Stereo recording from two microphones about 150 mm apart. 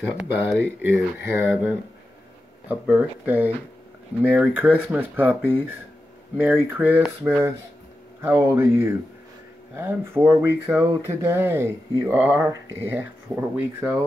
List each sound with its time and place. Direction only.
0.0 s speech: 5° right (ahead or behind)